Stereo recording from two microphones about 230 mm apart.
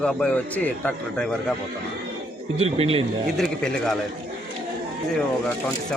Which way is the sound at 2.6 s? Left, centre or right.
Right.